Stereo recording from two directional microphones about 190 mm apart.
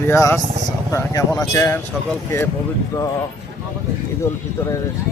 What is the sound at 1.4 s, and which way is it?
Speech, 15° left (ahead or behind).